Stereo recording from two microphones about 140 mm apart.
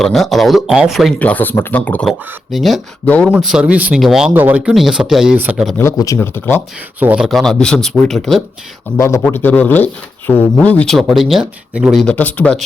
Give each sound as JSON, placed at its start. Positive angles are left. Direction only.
{"t": 0.0, "sound": "speech", "side_deg": 0}
{"t": 1.2, "sound": "speech", "side_deg": 10}
{"t": 6.1, "sound": "speech", "side_deg": 15}
{"t": 7.0, "sound": "speech", "side_deg": -10}
{"t": 7.3, "sound": "speech", "side_deg": 0}
{"t": 9.0, "sound": "speech", "side_deg": 20}
{"t": 12.0, "sound": "speech", "side_deg": 10}